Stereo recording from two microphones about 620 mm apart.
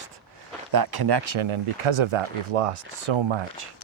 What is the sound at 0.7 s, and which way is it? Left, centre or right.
Speech, right.